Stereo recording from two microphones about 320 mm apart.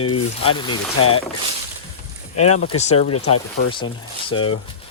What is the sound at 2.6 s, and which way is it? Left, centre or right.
Speech, left.